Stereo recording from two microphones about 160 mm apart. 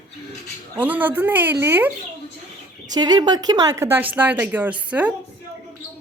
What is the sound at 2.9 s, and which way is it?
Speech, 25° right (ahead or behind).